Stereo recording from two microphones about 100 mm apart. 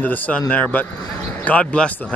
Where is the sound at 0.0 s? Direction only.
15° left (ahead or behind).